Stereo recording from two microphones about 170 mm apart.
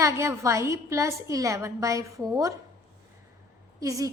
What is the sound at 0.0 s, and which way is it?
A woman's voice, 15° right (ahead or behind).